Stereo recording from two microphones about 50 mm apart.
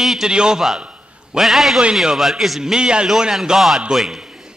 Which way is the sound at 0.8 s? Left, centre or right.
Right.